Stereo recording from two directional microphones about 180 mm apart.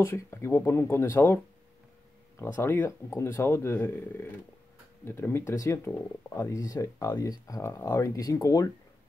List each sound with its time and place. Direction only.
0.0 s speech: 15° left (ahead or behind)